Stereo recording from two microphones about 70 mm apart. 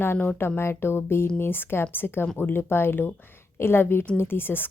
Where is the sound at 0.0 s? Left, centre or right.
Left.